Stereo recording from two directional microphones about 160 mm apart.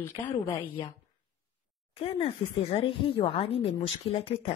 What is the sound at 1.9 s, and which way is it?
A woman's voice, 35° left (ahead or behind).